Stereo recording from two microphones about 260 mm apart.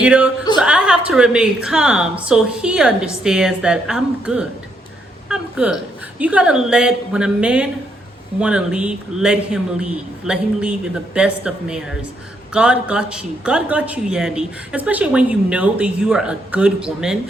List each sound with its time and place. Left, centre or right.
0.0 s speech: centre
5.3 s hiccup: centre
6.1 s speech: centre